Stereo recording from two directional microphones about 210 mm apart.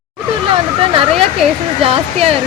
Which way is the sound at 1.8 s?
30° right (ahead or behind).